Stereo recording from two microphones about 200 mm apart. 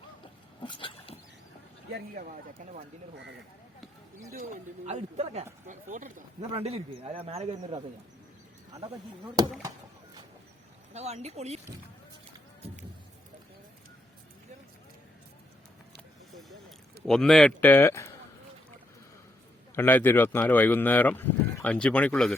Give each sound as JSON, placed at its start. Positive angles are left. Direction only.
{"t": 0.6, "sound": "dog", "side_deg": 25}
{"t": 2.1, "sound": "speech", "side_deg": -45}
{"t": 4.3, "sound": "speech", "side_deg": -40}
{"t": 9.4, "sound": "speech", "side_deg": -20}
{"t": 10.9, "sound": "speech", "side_deg": -35}
{"t": 16.3, "sound": "a sound", "side_deg": 0}
{"t": 17.1, "sound": "speech", "side_deg": 0}
{"t": 19.7, "sound": "speech", "side_deg": 10}